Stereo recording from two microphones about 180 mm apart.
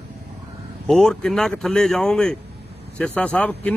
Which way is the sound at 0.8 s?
5° left (ahead or behind).